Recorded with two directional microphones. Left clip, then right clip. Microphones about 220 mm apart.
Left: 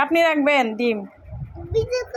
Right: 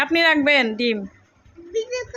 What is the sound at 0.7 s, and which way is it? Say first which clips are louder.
Speech: even; 50° right (ahead or behind).